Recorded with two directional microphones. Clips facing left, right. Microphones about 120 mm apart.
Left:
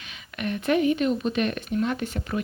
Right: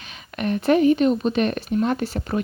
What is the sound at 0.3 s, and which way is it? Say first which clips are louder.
Speech: right 5 dB; 35° right (ahead or behind).